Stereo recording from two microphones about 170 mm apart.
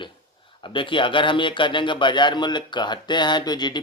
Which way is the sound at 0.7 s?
30° left (ahead or behind).